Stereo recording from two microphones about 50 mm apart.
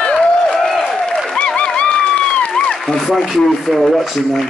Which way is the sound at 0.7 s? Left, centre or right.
Centre.